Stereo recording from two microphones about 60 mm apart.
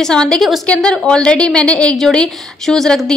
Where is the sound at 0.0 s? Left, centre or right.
Centre.